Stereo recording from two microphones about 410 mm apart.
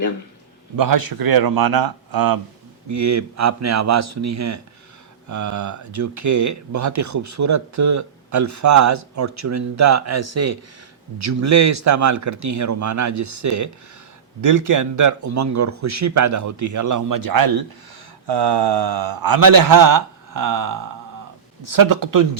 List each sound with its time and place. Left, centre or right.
0.8 s speech: right
2.9 s speech: right
18.3 s speech: right